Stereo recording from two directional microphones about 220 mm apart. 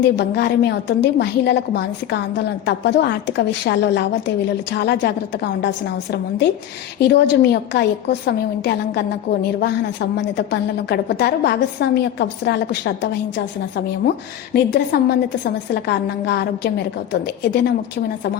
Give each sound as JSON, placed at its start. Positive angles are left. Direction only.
{"t": 0.0, "sound": "a woman's voice", "side_deg": 50}